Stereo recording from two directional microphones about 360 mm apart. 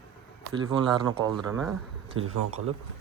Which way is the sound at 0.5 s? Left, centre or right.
Centre.